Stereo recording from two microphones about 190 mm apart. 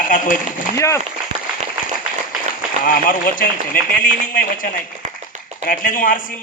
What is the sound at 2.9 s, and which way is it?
A man's voice, 45° left (ahead or behind).